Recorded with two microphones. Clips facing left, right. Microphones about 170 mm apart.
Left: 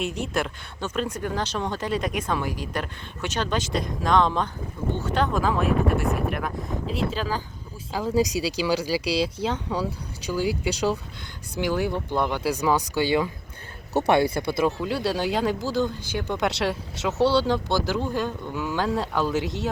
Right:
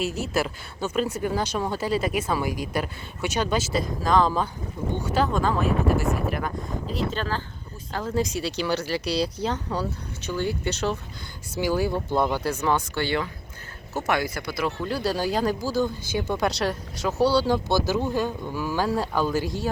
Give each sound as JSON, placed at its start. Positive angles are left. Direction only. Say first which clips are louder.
{"t": 0.0, "sound": "speech", "louder": "right 1 dB", "side_deg": -5}
{"t": 11.6, "sound": "speech", "louder": "right 1 dB", "side_deg": -5}
{"t": 12.4, "sound": "speech", "louder": "left 1 dB", "side_deg": 10}
{"t": 14.1, "sound": "speech", "louder": "left 5 dB", "side_deg": 25}
{"t": 14.8, "sound": "speech", "louder": "left 1 dB", "side_deg": 0}
{"t": 17.3, "sound": "speech", "louder": "right 1 dB", "side_deg": -10}
{"t": 18.5, "sound": "speech", "louder": "even", "side_deg": 0}